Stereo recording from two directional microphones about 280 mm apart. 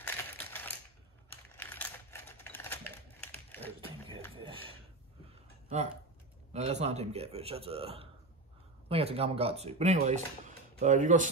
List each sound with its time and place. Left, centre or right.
0.0 s mechanisms: centre
1.6 s typewriter: centre
4.4 s a sound: centre
6.5 s speech: right